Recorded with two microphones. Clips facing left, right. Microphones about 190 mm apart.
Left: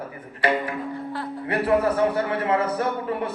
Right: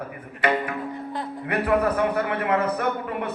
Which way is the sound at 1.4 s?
30° left (ahead or behind).